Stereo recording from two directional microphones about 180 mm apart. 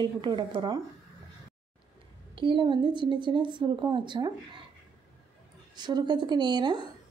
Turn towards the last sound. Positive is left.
turn(degrees=-25)  # may be behind; listen again after turning